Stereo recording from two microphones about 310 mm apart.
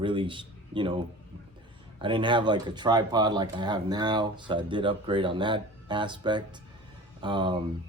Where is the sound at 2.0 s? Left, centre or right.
Centre.